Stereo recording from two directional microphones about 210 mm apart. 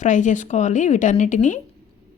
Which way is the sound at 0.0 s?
35° left (ahead or behind).